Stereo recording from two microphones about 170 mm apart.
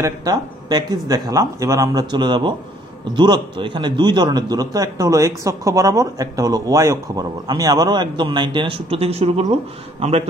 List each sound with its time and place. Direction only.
0.0 s a man's voice: 25° right (ahead or behind)